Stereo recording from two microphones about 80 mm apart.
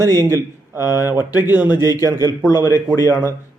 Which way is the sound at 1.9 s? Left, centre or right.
Left.